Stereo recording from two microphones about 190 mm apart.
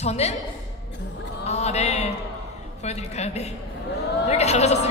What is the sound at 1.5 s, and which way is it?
Speech, 35° left (ahead or behind).